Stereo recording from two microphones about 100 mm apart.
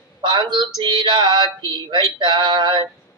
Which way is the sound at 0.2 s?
50° right (ahead or behind).